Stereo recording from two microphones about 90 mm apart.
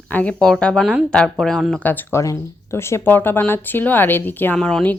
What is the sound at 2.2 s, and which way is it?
Speech, 35° left (ahead or behind).